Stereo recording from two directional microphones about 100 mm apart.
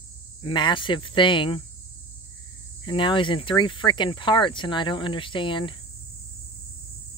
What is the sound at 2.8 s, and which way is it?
Speech, 55° left (ahead or behind).